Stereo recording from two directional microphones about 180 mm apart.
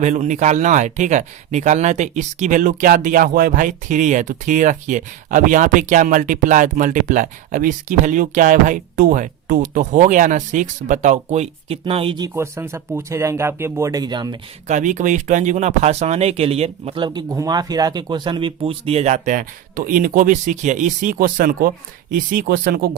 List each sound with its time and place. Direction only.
0.0 s speech: 40° right (ahead or behind)
12.3 s speech: 15° right (ahead or behind)
14.7 s speech: 40° right (ahead or behind)